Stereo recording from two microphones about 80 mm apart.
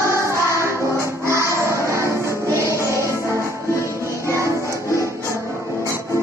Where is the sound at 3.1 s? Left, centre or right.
Left.